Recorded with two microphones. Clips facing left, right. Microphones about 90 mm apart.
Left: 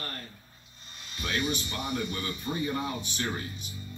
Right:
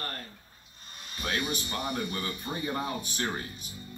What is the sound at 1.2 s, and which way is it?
A man's voice, 45° right (ahead or behind).